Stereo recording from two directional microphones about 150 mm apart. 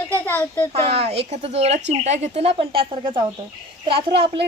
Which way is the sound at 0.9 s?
40° right (ahead or behind).